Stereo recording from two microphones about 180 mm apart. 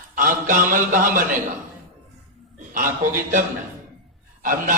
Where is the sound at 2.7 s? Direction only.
50° right (ahead or behind).